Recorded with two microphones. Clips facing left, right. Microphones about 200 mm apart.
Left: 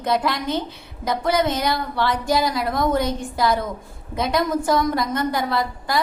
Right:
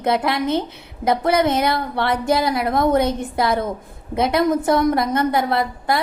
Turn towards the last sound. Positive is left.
turn(degrees=-60)  # may be behind; listen again after turning